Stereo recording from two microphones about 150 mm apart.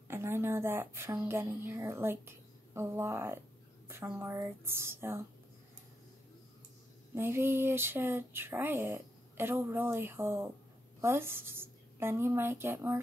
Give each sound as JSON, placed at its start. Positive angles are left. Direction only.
{"t": 0.1, "sound": "a woman's voice", "side_deg": -15}
{"t": 7.2, "sound": "speech", "side_deg": -15}